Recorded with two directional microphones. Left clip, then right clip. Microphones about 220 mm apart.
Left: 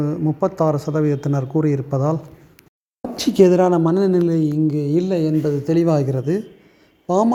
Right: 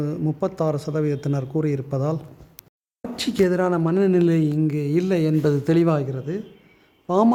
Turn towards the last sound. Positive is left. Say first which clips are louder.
# left 2 dB
turn(degrees=5)  # may be behind; listen again after turning